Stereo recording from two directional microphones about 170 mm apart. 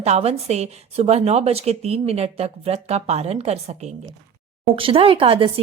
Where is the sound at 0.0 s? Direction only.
40° right (ahead or behind).